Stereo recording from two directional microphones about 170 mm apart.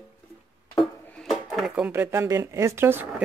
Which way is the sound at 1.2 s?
Centre (ahead or behind).